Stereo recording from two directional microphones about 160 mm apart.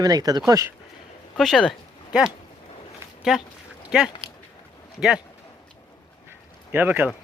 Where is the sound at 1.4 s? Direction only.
Centre (ahead or behind).